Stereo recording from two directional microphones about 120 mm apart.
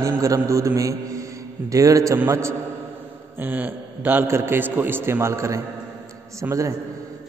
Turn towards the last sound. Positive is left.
turn(degrees=-25)  # may be behind; listen again after turning